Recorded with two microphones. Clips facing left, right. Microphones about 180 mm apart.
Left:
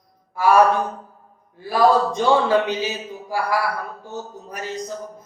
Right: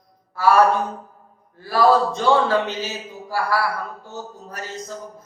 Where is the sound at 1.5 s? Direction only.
15° left (ahead or behind).